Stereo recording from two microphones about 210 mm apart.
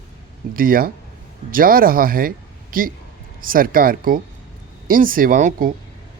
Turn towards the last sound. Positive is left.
turn(degrees=-40)  # may be behind; listen again after turning